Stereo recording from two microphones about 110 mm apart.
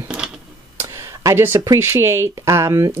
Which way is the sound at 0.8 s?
30° right (ahead or behind).